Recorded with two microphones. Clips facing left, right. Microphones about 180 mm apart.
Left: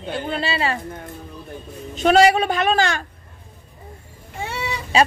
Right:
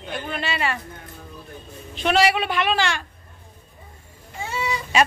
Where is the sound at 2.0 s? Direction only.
40° left (ahead or behind).